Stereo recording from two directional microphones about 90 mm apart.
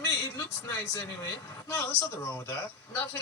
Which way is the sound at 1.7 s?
30° left (ahead or behind).